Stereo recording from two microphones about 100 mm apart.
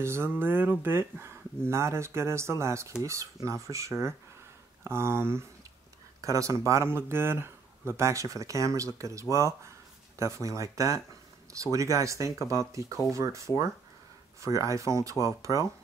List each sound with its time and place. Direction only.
0.0 s speech: 25° right (ahead or behind)
14.4 s speech: 35° right (ahead or behind)